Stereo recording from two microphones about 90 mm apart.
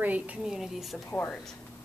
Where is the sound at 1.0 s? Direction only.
25° left (ahead or behind).